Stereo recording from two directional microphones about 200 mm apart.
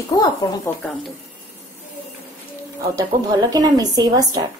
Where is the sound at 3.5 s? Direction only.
20° right (ahead or behind).